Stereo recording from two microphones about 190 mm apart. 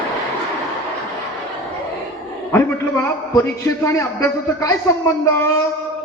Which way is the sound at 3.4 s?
15° left (ahead or behind).